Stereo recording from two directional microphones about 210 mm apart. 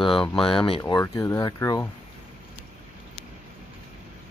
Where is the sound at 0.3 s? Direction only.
25° left (ahead or behind).